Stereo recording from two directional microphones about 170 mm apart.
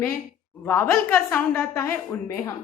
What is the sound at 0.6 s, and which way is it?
A woman's voice, 15° left (ahead or behind).